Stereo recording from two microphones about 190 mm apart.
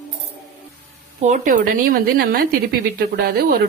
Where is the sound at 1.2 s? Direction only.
40° right (ahead or behind).